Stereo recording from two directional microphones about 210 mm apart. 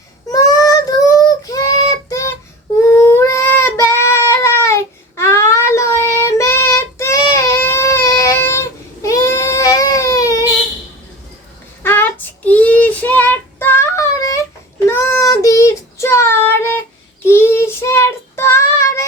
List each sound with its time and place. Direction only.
0.3 s child singing: 15° left (ahead or behind)
11.8 s child singing: 10° left (ahead or behind)